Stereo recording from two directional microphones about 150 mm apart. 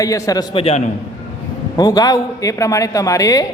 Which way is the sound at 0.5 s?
40° left (ahead or behind).